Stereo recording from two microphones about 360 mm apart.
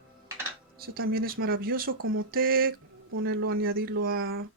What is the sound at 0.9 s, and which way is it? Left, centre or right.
Speech, right.